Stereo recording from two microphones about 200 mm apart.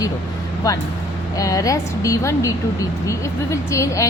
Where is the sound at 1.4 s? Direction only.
15° left (ahead or behind).